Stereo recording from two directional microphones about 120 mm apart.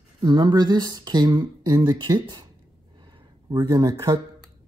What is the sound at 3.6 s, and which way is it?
Speech, 35° right (ahead or behind).